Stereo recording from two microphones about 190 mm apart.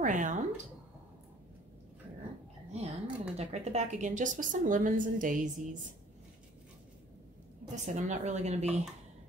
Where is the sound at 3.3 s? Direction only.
35° right (ahead or behind).